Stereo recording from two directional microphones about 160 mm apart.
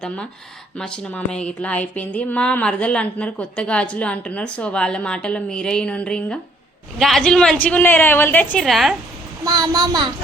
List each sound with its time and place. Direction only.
0.8 s speech: 5° left (ahead or behind)
9.4 s a woman's voice: 25° right (ahead or behind)